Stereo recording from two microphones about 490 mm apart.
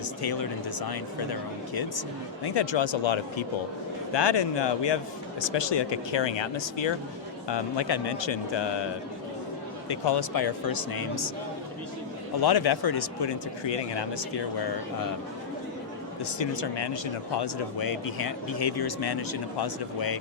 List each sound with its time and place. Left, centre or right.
0.2 s speech: left
4.1 s speech: left
9.9 s speech: left
12.4 s speech: left
16.4 s speech: left